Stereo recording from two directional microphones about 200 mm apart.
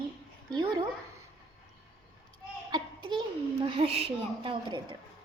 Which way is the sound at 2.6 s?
20° right (ahead or behind).